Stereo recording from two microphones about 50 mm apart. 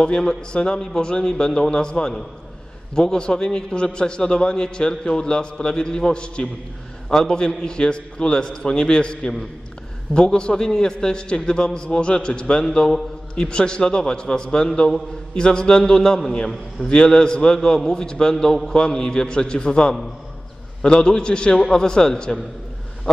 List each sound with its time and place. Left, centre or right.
0.0 s a man's voice: centre